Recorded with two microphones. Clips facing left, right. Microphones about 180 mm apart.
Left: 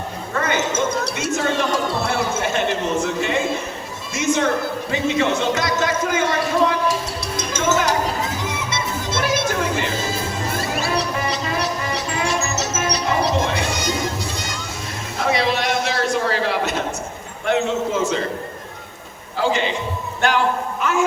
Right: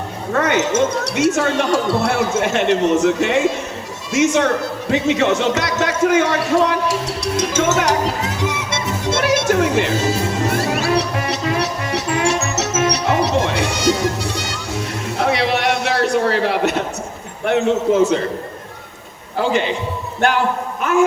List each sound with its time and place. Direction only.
0.3 s speech: 70° right (ahead or behind)
4.1 s music: 75° right (ahead or behind)
15.2 s a sound: 65° right (ahead or behind)
17.4 s a man's voice: 60° right (ahead or behind)
20.2 s a man's voice: 55° right (ahead or behind)
20.8 s music: 55° right (ahead or behind)